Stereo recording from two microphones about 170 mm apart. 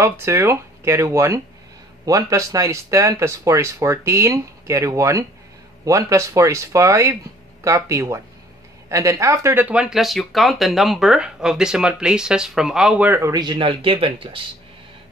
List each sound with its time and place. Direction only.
0.0 s speech: 15° right (ahead or behind); by 14.4 s 30° right (ahead or behind)